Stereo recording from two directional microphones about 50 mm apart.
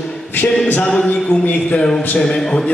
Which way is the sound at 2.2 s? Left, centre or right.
Centre.